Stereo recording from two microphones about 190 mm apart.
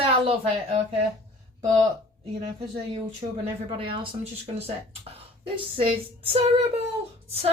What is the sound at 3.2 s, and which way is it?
A woman's voice, 25° right (ahead or behind).